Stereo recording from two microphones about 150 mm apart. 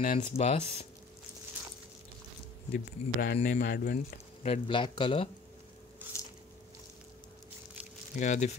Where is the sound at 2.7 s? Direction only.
70° left (ahead or behind); by 4.0 s 90° left.